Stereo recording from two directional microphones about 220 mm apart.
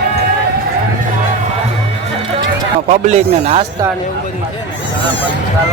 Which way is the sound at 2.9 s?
30° right (ahead or behind).